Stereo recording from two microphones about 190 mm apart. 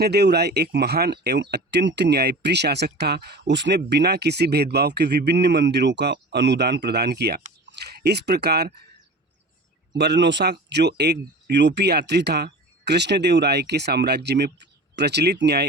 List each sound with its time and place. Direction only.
0.0 s speech: 60° right (ahead or behind)
10.0 s speech: 65° right (ahead or behind)